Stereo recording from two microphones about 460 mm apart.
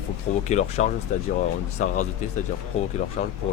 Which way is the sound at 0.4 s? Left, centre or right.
Centre.